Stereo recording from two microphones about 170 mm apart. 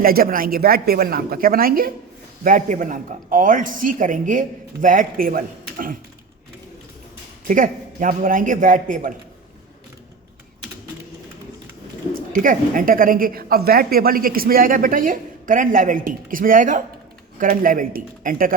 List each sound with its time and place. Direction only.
0.0 s a woman's voice: 60° right (ahead or behind)
7.4 s a woman's voice: 50° right (ahead or behind)
12.3 s a woman's voice: 50° right (ahead or behind)